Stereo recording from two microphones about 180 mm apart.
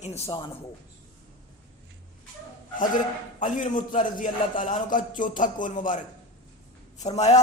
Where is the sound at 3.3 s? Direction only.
45° left (ahead or behind).